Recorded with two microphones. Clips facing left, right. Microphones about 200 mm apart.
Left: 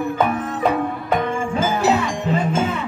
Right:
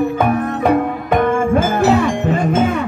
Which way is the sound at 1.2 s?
55° right (ahead or behind).